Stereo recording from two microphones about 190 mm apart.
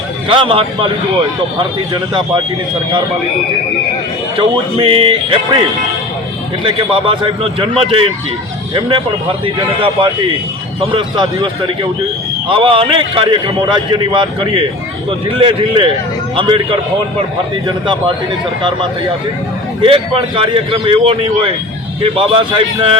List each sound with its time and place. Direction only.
0.3 s a man's voice: 25° right (ahead or behind)
4.4 s a man's voice: 25° right (ahead or behind)
6.7 s a man's voice: 25° right (ahead or behind)
10.8 s a man's voice: 30° right (ahead or behind)
12.5 s a man's voice: 30° right (ahead or behind)
19.8 s a man's voice: 30° right (ahead or behind)